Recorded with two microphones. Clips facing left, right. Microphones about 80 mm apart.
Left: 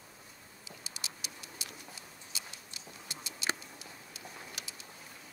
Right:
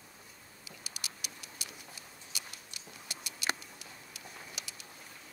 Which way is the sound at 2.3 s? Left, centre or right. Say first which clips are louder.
Even; right.